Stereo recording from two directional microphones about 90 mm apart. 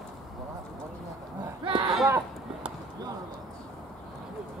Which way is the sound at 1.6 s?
70° right (ahead or behind).